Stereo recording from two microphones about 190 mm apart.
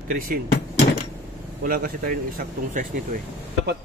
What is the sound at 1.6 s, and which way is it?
Speech, 50° right (ahead or behind).